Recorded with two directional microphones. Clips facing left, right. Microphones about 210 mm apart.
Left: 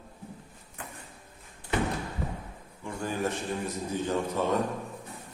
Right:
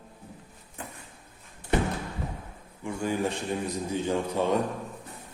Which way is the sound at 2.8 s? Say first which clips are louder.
Right 3 dB; 15° right (ahead or behind).